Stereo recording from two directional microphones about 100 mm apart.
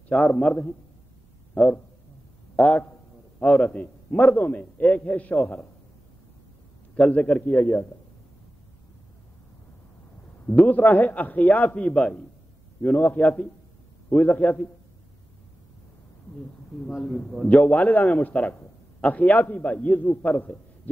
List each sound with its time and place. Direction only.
0.1 s a man's voice: 10° left (ahead or behind)
7.0 s a man's voice: 15° left (ahead or behind)
10.4 s a man's voice: 15° left (ahead or behind)
16.9 s a man's voice: 5° left (ahead or behind)